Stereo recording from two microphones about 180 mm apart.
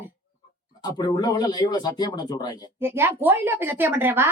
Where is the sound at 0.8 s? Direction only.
25° left (ahead or behind).